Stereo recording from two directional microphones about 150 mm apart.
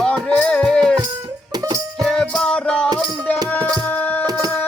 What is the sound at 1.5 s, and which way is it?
Music, 25° right (ahead or behind).